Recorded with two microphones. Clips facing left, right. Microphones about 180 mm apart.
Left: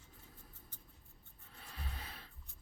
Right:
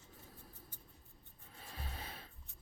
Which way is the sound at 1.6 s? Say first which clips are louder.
Right 1 dB; 25° right (ahead or behind).